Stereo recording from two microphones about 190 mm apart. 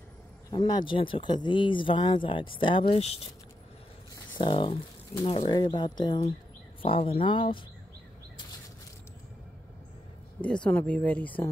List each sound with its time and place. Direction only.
0.5 s speech: 25° left (ahead or behind)
4.1 s a sound: 25° left (ahead or behind)
5.2 s speech: 30° left (ahead or behind)
10.4 s speech: 5° left (ahead or behind)